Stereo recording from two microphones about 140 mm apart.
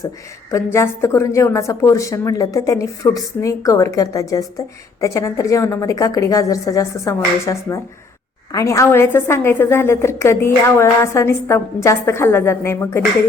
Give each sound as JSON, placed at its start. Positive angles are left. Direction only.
{"t": 0.5, "sound": "a woman's voice", "side_deg": 20}